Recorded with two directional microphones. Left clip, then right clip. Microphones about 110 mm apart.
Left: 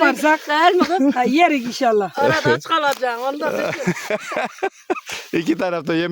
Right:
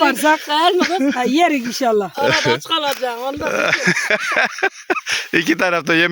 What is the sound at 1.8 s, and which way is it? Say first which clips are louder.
Speech: even; 45° right (ahead or behind).